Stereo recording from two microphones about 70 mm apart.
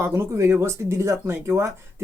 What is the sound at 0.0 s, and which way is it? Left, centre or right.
Speech, right.